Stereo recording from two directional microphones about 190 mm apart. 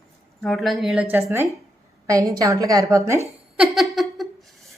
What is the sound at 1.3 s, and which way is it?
A woman's voice, 15° right (ahead or behind).